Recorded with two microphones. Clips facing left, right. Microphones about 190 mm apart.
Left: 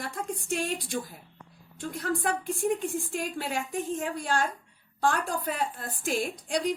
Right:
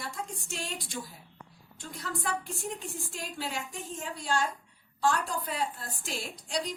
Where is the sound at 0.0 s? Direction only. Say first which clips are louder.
Left 5 dB; 55° left (ahead or behind).